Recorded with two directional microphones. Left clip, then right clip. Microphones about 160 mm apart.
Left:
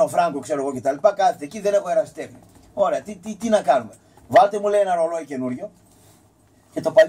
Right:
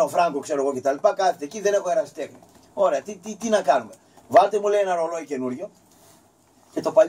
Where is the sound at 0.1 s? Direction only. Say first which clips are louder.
Left 1 dB; 20° left (ahead or behind).